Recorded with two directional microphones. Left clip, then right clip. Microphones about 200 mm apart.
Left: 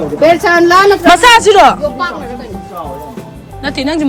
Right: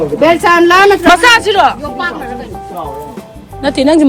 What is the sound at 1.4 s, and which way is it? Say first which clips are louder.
Speech: left 4 dB; 35° left (ahead or behind).